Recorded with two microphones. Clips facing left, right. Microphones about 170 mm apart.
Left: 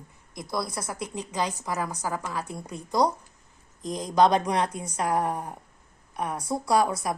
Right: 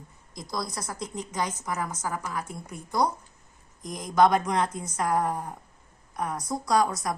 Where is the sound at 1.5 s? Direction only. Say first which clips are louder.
Left 1 dB; 35° left (ahead or behind).